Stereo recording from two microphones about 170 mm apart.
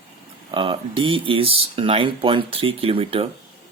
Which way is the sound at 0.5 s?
30° right (ahead or behind).